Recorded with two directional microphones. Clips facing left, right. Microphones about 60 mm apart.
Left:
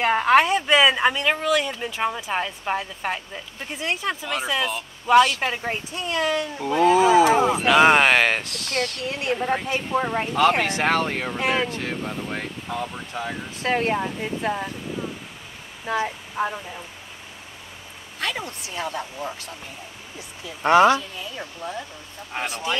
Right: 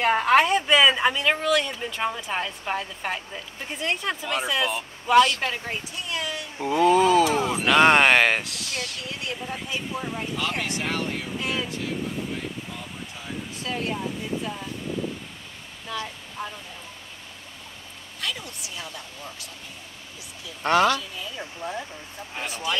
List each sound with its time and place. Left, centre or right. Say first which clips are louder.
0.0 s speech: left 2 dB; centre
5.6 s speech: left 4 dB; left
6.8 s speech: left 2 dB; centre
9.0 s speech: left 8 dB; left
15.9 s speech: left 8 dB; left
18.4 s speech: left 7 dB; left
20.6 s speech: left 5 dB; left
21.5 s speech: right 1 dB; centre